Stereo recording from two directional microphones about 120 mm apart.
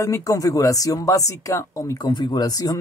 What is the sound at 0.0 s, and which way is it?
Speech, 30° left (ahead or behind).